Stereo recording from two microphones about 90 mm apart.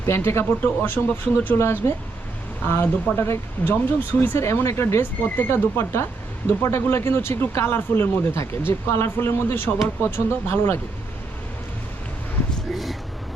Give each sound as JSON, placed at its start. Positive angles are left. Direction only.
{"t": 0.0, "sound": "speech", "side_deg": 30}
{"t": 12.7, "sound": "vehicle", "side_deg": 0}